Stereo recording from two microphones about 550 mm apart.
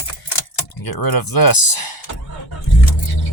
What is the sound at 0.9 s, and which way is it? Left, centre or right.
Speech, left.